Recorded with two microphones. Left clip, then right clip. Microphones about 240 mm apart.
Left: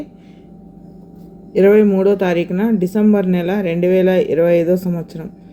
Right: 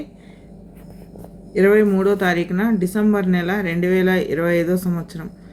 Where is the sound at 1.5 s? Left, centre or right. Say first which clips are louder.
Left 4 dB; centre.